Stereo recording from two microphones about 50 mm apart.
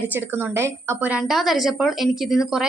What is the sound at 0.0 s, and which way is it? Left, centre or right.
Speech, right.